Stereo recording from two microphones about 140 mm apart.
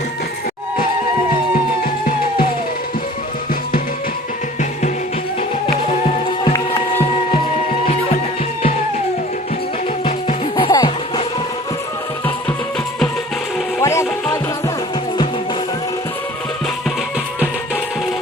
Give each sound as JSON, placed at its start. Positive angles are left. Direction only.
{"t": 1.5, "sound": "music", "side_deg": 90}
{"t": 5.8, "sound": "music", "side_deg": 50}
{"t": 10.0, "sound": "music", "side_deg": 40}
{"t": 13.8, "sound": "music", "side_deg": 20}